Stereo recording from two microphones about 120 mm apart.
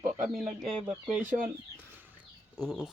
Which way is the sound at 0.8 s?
10° right (ahead or behind).